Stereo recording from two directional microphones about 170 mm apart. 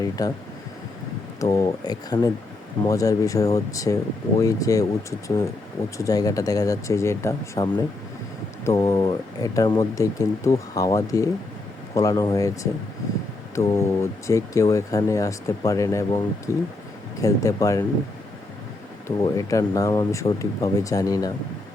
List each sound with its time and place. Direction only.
0.0 s speech: 20° left (ahead or behind)
1.4 s speech: 20° left (ahead or behind)
6.0 s speech: 20° left (ahead or behind)
13.6 s speech: 15° left (ahead or behind)
19.0 s speech: 20° left (ahead or behind)